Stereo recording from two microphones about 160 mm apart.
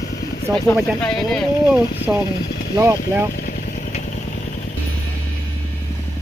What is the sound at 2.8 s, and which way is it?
Speech, 15° right (ahead or behind).